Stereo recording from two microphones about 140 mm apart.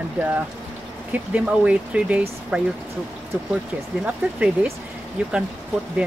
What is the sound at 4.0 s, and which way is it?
Speech, 10° right (ahead or behind).